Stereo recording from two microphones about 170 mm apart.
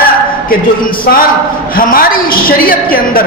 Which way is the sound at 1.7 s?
55° left (ahead or behind).